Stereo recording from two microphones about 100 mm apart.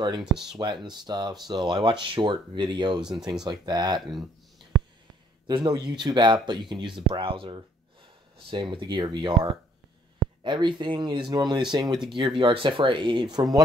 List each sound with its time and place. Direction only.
0.2 s speech: 5° right (ahead or behind)
0.6 s speech: 45° right (ahead or behind)
3.0 s speech: 5° right (ahead or behind)
3.4 s speech: 45° right (ahead or behind)
5.5 s speech: 50° right (ahead or behind)